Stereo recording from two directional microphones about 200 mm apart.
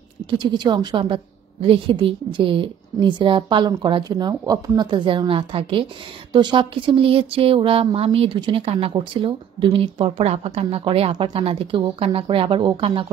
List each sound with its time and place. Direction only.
0.4 s speech: 20° right (ahead or behind)